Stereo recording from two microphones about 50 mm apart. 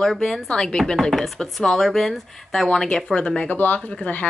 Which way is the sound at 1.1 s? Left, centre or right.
Centre.